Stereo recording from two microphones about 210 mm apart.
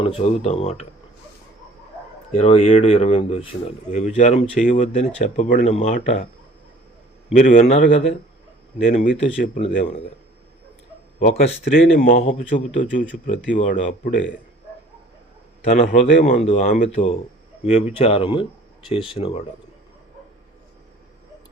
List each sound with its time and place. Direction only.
0.0 s speech: 30° left (ahead or behind)
2.3 s speech: 30° left (ahead or behind)
7.3 s speech: 35° left (ahead or behind)
11.9 s speech: 35° left (ahead or behind)
15.7 s speech: 35° left (ahead or behind)